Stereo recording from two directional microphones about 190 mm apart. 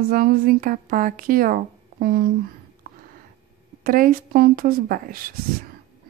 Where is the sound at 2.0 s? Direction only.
50° right (ahead or behind).